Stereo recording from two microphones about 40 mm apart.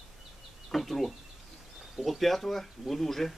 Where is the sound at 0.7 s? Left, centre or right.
Centre.